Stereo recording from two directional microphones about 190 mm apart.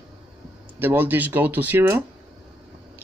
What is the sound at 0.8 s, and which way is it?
Speech, 10° right (ahead or behind).